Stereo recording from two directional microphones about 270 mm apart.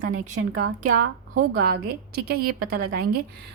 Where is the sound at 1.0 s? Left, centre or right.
Right.